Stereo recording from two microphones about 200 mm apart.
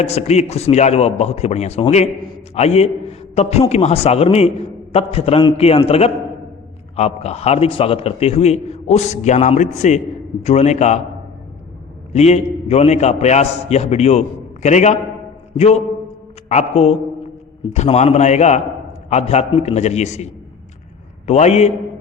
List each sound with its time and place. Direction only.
0.0 s a man's voice: 30° left (ahead or behind)
12.1 s a man's voice: 35° left (ahead or behind)
21.2 s a man's voice: 35° left (ahead or behind)